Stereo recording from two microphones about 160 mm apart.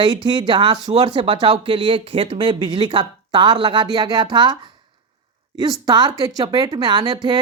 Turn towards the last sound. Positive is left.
turn(degrees=-30)  # may be behind; listen again after turning